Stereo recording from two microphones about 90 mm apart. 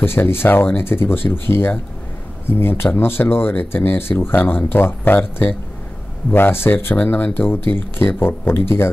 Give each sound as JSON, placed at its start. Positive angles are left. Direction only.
{"t": 0.0, "sound": "speech", "side_deg": 25}